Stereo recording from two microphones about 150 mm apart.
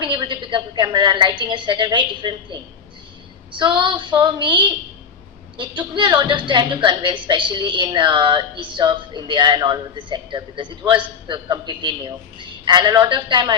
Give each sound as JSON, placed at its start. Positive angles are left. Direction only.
{"t": 0.0, "sound": "a woman's voice", "side_deg": -30}